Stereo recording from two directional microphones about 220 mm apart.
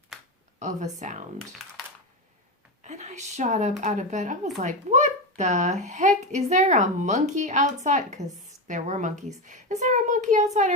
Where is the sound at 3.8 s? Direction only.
35° right (ahead or behind).